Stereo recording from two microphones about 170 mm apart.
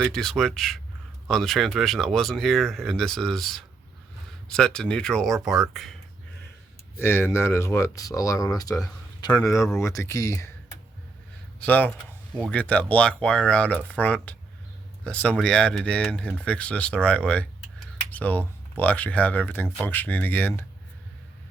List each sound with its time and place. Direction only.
0.0 s speech: 5° left (ahead or behind)
7.0 s speech: 15° left (ahead or behind)
11.6 s speech: 10° left (ahead or behind)